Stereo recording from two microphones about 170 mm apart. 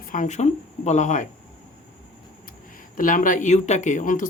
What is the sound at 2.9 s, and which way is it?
Speech, 50° left (ahead or behind).